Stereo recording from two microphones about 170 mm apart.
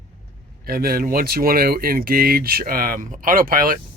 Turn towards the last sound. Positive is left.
turn(degrees=-55)  # may be behind; listen again after turning